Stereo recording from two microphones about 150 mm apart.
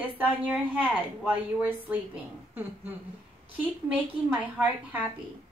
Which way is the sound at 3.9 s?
10° right (ahead or behind).